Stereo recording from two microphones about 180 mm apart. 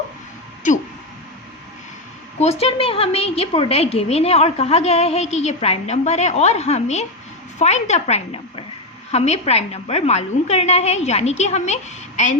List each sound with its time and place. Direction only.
2.4 s a woman's voice: 35° left (ahead or behind)